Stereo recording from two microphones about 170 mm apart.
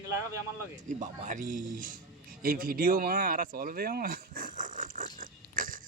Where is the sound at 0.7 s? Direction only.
50° right (ahead or behind).